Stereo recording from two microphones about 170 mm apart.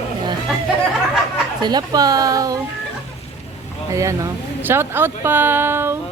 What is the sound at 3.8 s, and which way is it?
Speech, 20° right (ahead or behind).